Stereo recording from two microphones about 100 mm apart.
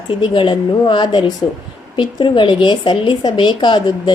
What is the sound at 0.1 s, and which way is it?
A woman's voice, 55° left (ahead or behind).